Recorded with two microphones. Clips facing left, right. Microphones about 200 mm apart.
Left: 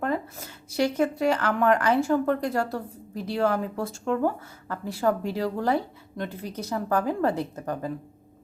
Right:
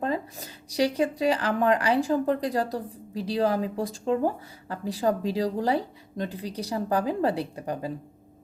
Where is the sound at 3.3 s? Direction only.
15° right (ahead or behind).